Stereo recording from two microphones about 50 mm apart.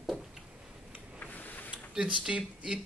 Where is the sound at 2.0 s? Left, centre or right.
Right.